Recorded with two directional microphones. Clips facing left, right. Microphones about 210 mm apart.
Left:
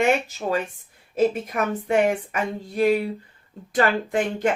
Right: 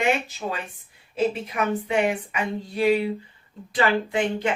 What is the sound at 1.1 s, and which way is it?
Speech, 45° left (ahead or behind).